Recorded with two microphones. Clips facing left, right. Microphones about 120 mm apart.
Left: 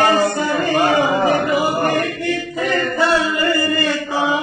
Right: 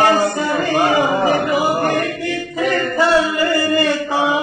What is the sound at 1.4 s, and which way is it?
Music, 30° right (ahead or behind).